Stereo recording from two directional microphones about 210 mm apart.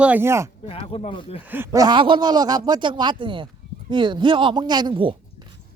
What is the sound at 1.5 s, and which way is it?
Speech, 10° right (ahead or behind).